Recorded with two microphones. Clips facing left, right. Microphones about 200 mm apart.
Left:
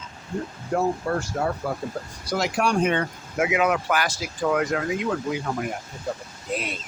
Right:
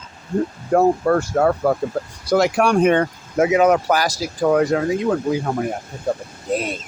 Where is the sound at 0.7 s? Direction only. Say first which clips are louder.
Right 8 dB; 60° right (ahead or behind).